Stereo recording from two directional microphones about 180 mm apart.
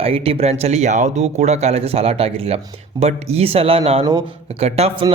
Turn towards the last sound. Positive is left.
turn(degrees=-35)  # may be behind; listen again after turning